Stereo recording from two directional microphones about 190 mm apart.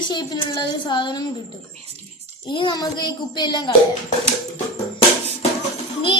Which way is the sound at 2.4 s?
25° left (ahead or behind).